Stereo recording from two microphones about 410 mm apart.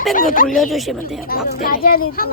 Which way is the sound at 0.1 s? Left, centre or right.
Centre.